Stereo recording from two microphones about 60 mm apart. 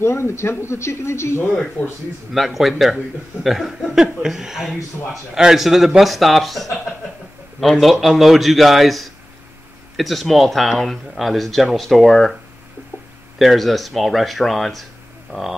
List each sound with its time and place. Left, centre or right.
0.0 s speech: left
1.8 s speech: centre
2.3 s speech: centre
13.4 s speech: centre
15.3 s speech: right